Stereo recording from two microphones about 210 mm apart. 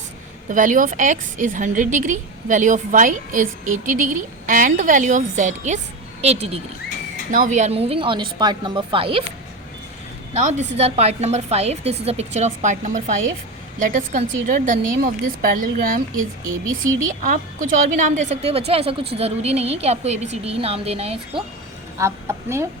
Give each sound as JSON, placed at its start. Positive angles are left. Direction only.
{"t": 0.5, "sound": "a woman's voice", "side_deg": -40}
{"t": 10.3, "sound": "a woman's voice", "side_deg": -35}
{"t": 17.2, "sound": "a woman's voice", "side_deg": -40}
{"t": 21.9, "sound": "a woman's voice", "side_deg": -15}